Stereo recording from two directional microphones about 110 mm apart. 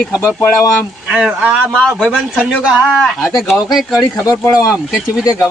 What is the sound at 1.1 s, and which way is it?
Speech, 10° right (ahead or behind).